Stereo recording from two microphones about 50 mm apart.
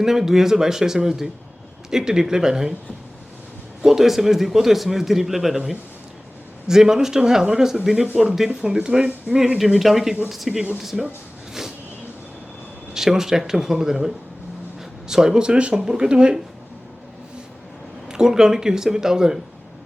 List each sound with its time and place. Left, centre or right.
0.0 s a man's voice: centre
3.8 s a man's voice: centre
9.6 s a man's voice: centre
12.9 s a man's voice: centre
18.1 s a man's voice: centre